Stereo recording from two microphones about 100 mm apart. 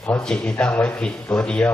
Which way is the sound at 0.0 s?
10° left (ahead or behind).